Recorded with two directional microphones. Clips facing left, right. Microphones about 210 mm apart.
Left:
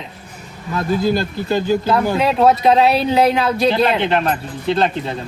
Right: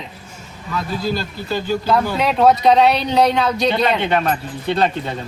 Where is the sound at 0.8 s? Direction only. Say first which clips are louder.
Left 5 dB; 50° left (ahead or behind).